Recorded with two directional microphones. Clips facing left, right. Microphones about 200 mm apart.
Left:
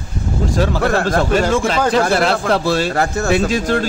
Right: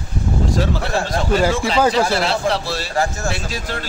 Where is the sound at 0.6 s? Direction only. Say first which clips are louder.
Left 5 dB; 55° left (ahead or behind).